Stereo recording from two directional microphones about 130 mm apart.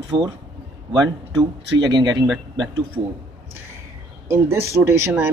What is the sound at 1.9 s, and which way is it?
Speech, 35° right (ahead or behind).